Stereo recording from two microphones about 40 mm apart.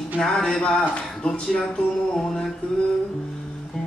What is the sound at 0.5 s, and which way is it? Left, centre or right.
Speech, left.